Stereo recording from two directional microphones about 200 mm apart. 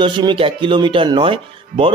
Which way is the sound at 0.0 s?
25° right (ahead or behind).